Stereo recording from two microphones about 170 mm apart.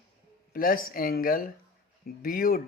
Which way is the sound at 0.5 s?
55° left (ahead or behind).